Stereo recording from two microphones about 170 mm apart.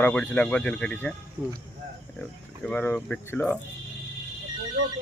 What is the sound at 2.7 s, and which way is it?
Speech, 10° left (ahead or behind).